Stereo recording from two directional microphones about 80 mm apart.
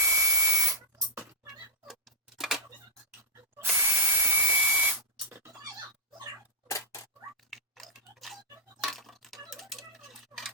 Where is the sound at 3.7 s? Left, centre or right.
Right.